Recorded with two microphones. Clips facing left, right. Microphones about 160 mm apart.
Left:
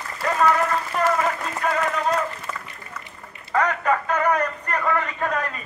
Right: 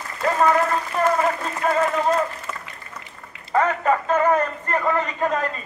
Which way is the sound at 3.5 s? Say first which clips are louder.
Right 2 dB; 25° right (ahead or behind).